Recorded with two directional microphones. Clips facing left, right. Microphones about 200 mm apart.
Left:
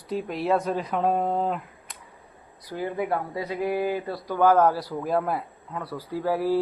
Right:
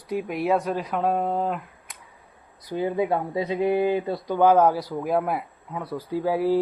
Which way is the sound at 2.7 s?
20° right (ahead or behind).